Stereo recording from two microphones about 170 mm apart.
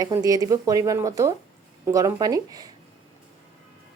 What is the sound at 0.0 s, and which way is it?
Speech, 20° right (ahead or behind).